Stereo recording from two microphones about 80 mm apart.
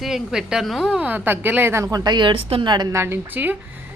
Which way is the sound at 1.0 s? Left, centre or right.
Right.